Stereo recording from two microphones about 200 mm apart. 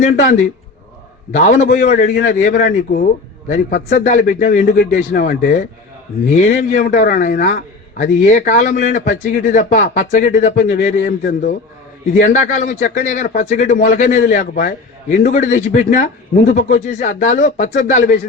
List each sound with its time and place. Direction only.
1.3 s a man's voice: 35° left (ahead or behind)